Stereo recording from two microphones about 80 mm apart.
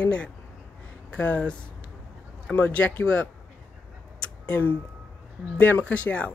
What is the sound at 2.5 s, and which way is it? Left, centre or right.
Speech, left.